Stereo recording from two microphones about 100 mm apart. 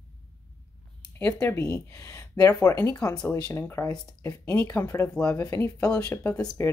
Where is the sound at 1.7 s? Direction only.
30° left (ahead or behind).